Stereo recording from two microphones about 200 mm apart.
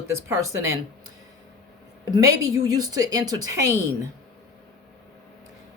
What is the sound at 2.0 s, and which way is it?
A woman's voice, 20° right (ahead or behind).